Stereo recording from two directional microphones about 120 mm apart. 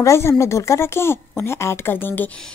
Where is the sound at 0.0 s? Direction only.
25° left (ahead or behind).